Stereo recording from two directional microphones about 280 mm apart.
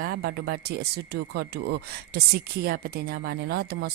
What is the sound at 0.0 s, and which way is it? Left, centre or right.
Speech, right.